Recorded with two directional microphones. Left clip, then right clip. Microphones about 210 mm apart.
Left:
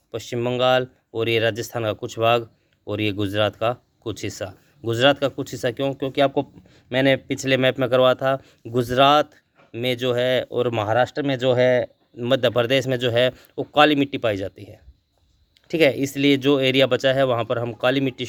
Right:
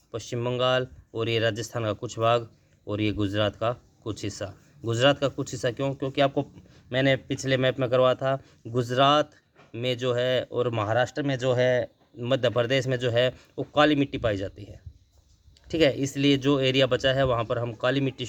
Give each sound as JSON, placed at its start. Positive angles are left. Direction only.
{"t": 0.1, "sound": "speech", "side_deg": 30}